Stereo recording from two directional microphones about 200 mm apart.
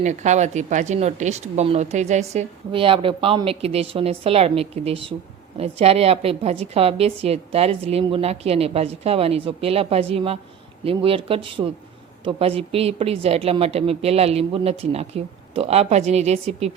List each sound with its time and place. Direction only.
0.0 s a woman's voice: 35° right (ahead or behind)